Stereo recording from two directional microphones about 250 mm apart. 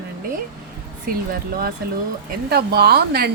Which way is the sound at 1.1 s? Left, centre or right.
Right.